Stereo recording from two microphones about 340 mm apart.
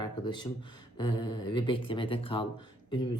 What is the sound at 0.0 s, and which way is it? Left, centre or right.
Speech, centre.